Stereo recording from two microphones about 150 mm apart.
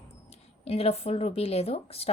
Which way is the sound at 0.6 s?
40° left (ahead or behind).